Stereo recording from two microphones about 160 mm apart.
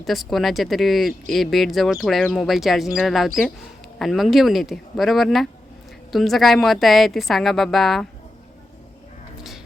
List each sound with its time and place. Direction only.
0.0 s speech: centre (ahead or behind)